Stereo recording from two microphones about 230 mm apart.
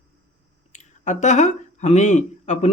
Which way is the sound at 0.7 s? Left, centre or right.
Left.